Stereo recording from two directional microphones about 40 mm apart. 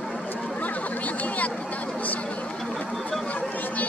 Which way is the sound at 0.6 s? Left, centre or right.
Left.